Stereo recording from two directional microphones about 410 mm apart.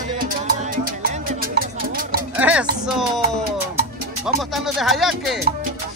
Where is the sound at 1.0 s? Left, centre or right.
Right.